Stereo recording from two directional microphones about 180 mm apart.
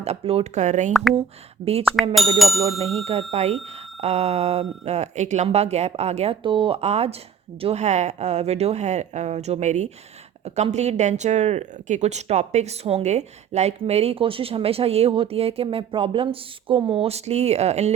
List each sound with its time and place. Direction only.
0.0 s speech: 35° right (ahead or behind)
2.1 s speech: centre (ahead or behind)
3.0 s speech: 35° right (ahead or behind)